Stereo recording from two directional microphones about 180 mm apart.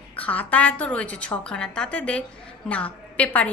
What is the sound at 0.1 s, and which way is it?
A woman's voice, 10° left (ahead or behind).